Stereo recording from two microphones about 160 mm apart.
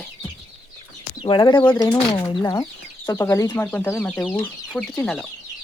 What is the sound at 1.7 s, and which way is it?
Speech, 10° left (ahead or behind).